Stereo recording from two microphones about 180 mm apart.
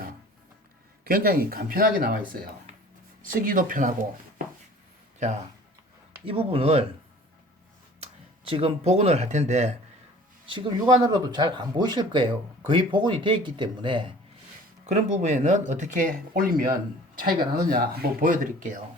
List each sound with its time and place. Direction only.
1.0 s speech: 55° right (ahead or behind)
3.2 s speech: 50° right (ahead or behind)
6.2 s speech: 30° right (ahead or behind)
8.4 s speech: 30° right (ahead or behind)
10.4 s speech: 30° right (ahead or behind)
14.8 s speech: 40° right (ahead or behind)
17.7 s speech: 55° right (ahead or behind)